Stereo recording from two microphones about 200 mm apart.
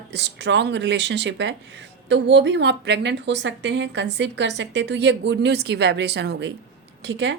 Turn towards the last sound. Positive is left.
turn(degrees=-60)  # may be behind; listen again after turning